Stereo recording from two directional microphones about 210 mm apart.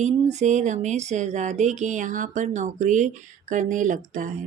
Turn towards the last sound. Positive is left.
turn(degrees=-40)  # may be behind; listen again after turning